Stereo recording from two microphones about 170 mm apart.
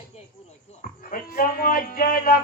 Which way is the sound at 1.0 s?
55° left (ahead or behind).